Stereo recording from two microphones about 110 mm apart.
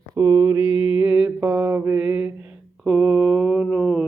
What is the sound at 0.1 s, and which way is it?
Mantra, 25° right (ahead or behind).